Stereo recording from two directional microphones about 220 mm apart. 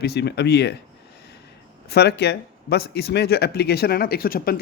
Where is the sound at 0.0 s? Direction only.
50° left (ahead or behind).